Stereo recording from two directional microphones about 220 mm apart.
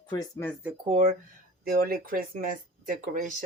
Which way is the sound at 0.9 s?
30° right (ahead or behind).